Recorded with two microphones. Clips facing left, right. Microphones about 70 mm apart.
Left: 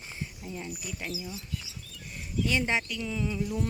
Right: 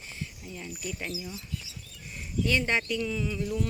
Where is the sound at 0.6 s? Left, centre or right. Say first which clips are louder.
Right 5 dB; centre.